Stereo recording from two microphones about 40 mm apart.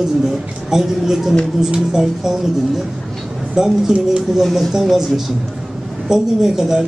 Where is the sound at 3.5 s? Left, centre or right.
Centre.